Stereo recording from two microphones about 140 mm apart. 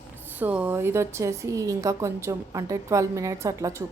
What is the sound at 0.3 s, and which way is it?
A woman's voice, 10° right (ahead or behind).